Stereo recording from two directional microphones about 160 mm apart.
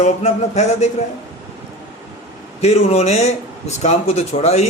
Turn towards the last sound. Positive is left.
turn(degrees=40)  # may be behind; listen again after turning